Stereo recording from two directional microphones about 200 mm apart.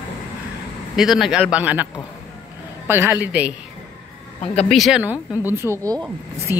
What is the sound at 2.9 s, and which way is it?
Speech, 10° right (ahead or behind).